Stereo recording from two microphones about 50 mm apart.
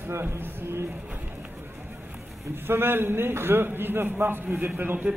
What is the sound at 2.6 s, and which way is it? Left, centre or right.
A man's voice, right.